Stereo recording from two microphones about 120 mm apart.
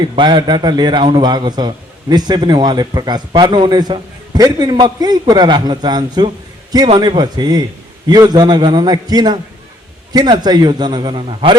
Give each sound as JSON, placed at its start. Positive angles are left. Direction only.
{"t": 0.0, "sound": "a man's voice", "side_deg": -40}